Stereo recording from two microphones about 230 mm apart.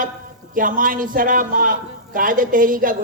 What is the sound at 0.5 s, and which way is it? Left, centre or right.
A woman's voice, right.